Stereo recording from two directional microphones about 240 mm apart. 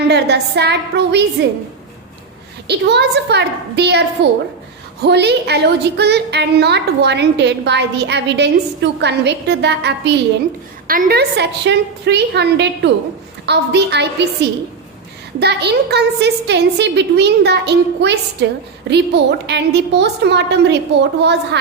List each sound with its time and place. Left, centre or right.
0.1 s a woman's voice: right
2.6 s a woman's voice: right
15.4 s a woman's voice: right